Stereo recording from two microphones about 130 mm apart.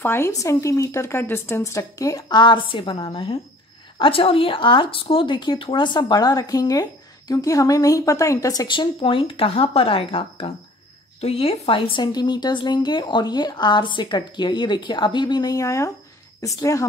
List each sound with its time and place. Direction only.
0.0 s speech: 20° left (ahead or behind)
9.0 s speech: 45° left (ahead or behind); by 16.8 s 25° left (ahead or behind)